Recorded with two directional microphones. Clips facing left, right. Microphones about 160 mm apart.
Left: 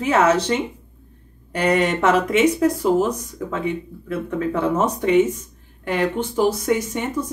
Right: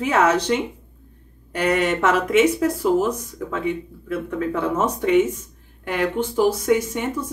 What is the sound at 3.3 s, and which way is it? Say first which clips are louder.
Speech: even; 10° left (ahead or behind).